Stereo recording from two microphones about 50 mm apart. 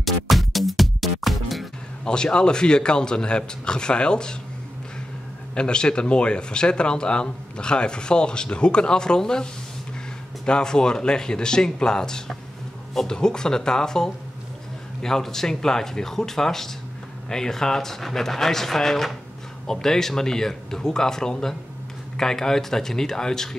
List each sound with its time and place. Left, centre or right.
0.0 s music: centre
2.0 s a man's voice: centre
5.5 s a man's voice: centre